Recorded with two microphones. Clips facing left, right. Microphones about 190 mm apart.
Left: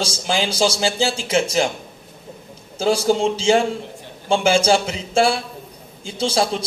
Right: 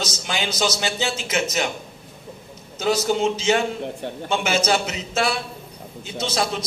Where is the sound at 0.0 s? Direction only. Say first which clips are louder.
Left 5 dB; 30° left (ahead or behind).